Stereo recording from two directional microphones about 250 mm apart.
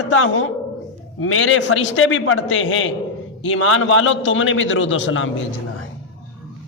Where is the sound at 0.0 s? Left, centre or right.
Left.